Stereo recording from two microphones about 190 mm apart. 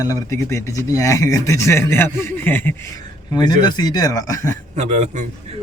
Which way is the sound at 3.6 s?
20° left (ahead or behind).